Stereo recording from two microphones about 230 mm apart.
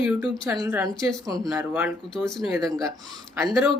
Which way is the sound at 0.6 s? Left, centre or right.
Centre.